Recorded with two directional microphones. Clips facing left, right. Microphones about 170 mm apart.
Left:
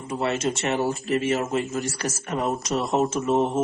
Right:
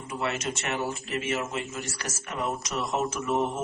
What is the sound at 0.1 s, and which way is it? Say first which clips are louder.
Speech: left 6 dB; 30° left (ahead or behind).